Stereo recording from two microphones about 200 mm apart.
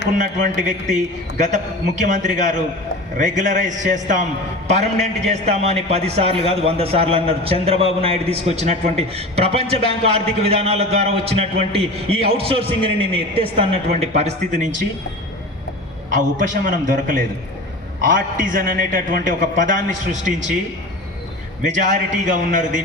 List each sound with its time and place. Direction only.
0.1 s a man's voice: 40° right (ahead or behind)
16.6 s a man's voice: 40° right (ahead or behind)
21.6 s a man's voice: 40° right (ahead or behind)